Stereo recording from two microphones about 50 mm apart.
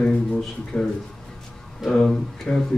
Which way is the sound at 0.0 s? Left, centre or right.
Left.